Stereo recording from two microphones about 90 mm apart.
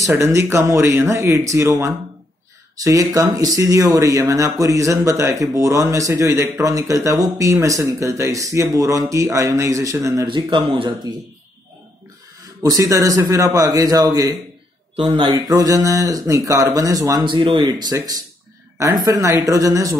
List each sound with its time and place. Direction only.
0.0 s speech: 35° right (ahead or behind)
6.6 s speech: 35° right (ahead or behind)
10.2 s speech: 70° right (ahead or behind)
12.6 s speech: 40° right (ahead or behind)
15.0 s speech: 80° right
15.3 s speech: 40° right (ahead or behind)
17.2 s speech: 70° right (ahead or behind)
17.6 s speech: 50° right (ahead or behind)